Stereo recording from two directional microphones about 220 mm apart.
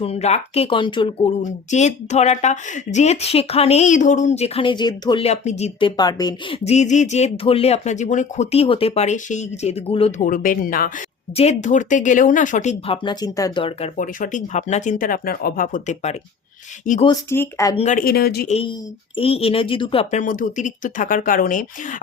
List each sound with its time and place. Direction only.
0.0 s speech: 30° left (ahead or behind)
6.0 s speech: 20° left (ahead or behind)
6.7 s speech: 30° left (ahead or behind)
10.2 s speech: 40° left (ahead or behind)
13.9 s speech: 35° left (ahead or behind)
17.1 s speech: 10° left (ahead or behind)
17.7 s speech: 35° left (ahead or behind)
18.4 s speech: 30° left (ahead or behind)